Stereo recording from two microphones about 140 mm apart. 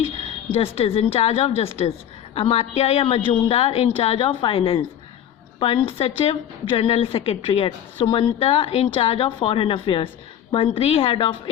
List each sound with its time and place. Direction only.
0.4 s a woman's voice: 40° left (ahead or behind)